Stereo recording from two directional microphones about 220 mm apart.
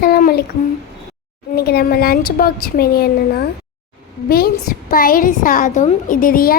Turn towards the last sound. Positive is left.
turn(degrees=40)  # may be behind; listen again after turning